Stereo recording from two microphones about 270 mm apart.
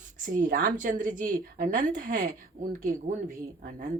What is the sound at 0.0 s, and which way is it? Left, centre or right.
A woman's voice, right.